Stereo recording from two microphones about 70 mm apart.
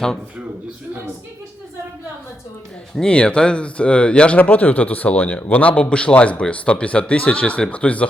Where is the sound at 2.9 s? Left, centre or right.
Centre.